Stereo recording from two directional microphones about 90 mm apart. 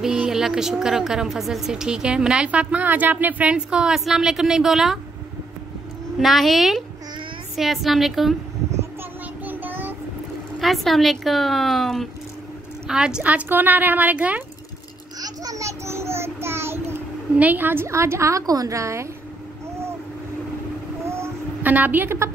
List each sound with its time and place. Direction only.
0.0 s a woman's voice: 5° right (ahead or behind)
6.2 s a woman's voice: centre (ahead or behind)
9.4 s child singing: 20° right (ahead or behind)
10.6 s a woman's voice: centre (ahead or behind)
12.8 s a woman's voice: 10° right (ahead or behind)
15.1 s a sound: 45° right (ahead or behind); by 16.8 s 25° right (ahead or behind)
17.4 s a woman's voice: 20° right (ahead or behind); by 19.0 s 35° right (ahead or behind)
21.0 s a sound: 30° right (ahead or behind)
21.6 s a woman's voice: 20° right (ahead or behind)